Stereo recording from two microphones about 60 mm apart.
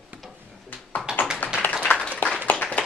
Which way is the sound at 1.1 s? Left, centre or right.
Centre.